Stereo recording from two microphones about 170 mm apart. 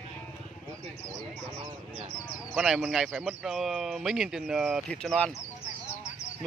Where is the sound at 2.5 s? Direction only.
5° right (ahead or behind).